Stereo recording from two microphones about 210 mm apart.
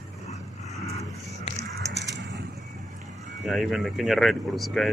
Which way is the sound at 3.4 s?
Centre (ahead or behind).